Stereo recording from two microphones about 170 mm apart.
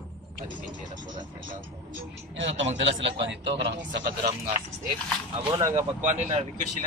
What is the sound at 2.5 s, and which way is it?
Speech, 40° right (ahead or behind).